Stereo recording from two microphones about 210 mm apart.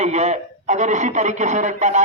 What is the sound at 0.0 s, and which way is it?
A man's voice, 35° right (ahead or behind).